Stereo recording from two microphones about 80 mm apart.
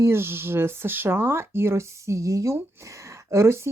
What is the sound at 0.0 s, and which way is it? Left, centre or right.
Speech, right.